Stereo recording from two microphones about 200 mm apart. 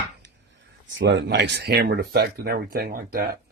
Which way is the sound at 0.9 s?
60° right (ahead or behind).